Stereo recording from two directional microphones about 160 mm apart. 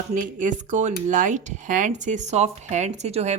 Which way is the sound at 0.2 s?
55° right (ahead or behind).